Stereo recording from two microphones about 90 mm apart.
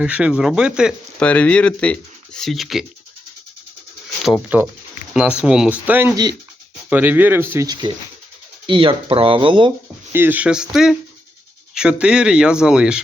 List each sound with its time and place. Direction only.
0.0 s speech: 10° right (ahead or behind)
1.2 s speech: 15° left (ahead or behind)
4.5 s speech: 15° right (ahead or behind)
8.6 s speech: 65° right (ahead or behind)
10.1 s speech: 25° right (ahead or behind); by 13.0 s 10° right (ahead or behind)